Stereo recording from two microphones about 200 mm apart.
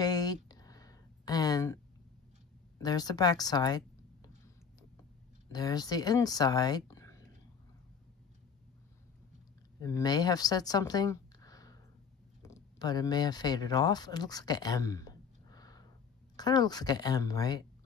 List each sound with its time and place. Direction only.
0.0 s a sound: 20° left (ahead or behind)
2.8 s speech: 20° left (ahead or behind)
5.5 s speech: 20° left (ahead or behind)
9.8 s speech: 15° left (ahead or behind)